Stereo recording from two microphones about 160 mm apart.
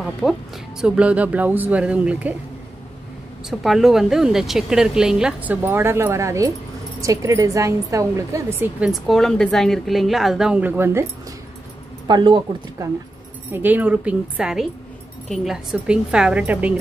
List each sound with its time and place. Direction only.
0.0 s a woman's voice: centre (ahead or behind)
3.4 s a woman's voice: centre (ahead or behind)
12.1 s speech: 25° right (ahead or behind)
13.5 s a woman's voice: 10° right (ahead or behind)